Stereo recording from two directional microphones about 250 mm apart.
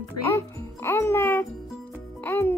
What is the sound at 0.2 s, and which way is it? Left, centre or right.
Music, centre.